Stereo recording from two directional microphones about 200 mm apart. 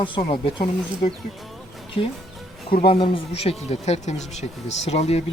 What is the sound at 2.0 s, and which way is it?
Speech, 25° left (ahead or behind).